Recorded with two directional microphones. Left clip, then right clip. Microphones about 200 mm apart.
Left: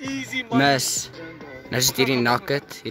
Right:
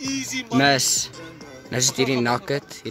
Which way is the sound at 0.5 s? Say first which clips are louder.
Right 1 dB; centre (ahead or behind).